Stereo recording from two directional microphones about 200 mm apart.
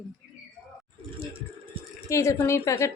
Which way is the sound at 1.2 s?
25° right (ahead or behind).